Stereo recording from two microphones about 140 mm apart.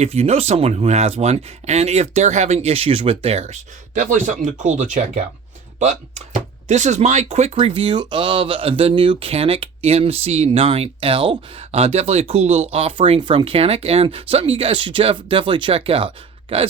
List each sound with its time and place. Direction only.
0.0 s speech: 45° right (ahead or behind)